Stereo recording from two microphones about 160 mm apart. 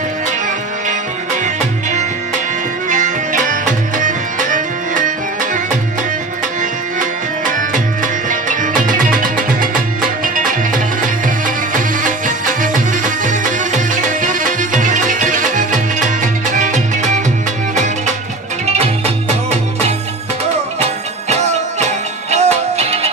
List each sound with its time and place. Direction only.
1.4 s music: 50° right (ahead or behind)
7.4 s music: 55° right (ahead or behind)
21.2 s music: 45° right (ahead or behind)